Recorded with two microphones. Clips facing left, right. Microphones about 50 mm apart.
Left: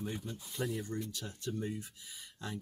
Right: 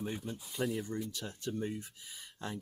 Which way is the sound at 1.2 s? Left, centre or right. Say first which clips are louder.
Right 1 dB; right.